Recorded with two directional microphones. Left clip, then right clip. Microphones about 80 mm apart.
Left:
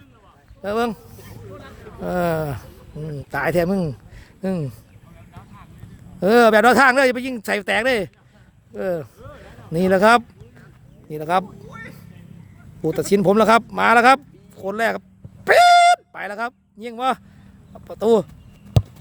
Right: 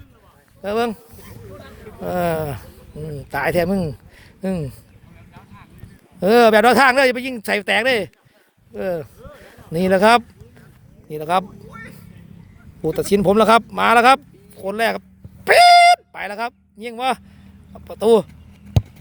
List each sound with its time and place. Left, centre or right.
0.6 s speech: left
1.5 s a sound: centre
1.7 s speech: left
2.6 s a sound: centre
3.0 s speech: left
3.3 s speech: left
6.1 s speech: left
11.4 s music: centre
12.8 s speech: left
15.4 s a sound: left
17.7 s speech: left